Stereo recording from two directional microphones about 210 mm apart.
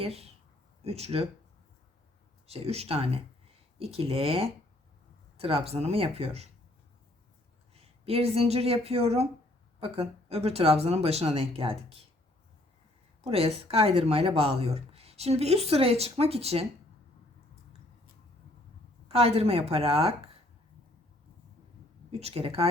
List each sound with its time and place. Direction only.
0.0 s speech: 30° right (ahead or behind)
2.5 s speech: 30° right (ahead or behind)
7.8 s speech: 30° right (ahead or behind)
13.2 s speech: 30° right (ahead or behind)
19.0 s speech: 30° right (ahead or behind)
22.1 s speech: 30° right (ahead or behind)